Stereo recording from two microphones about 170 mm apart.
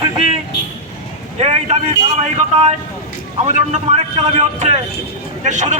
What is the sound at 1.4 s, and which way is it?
Boat, 40° right (ahead or behind).